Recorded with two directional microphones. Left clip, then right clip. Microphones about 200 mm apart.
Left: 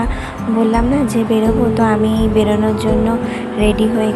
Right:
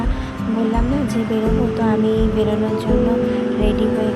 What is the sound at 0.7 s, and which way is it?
Speech, 5° left (ahead or behind).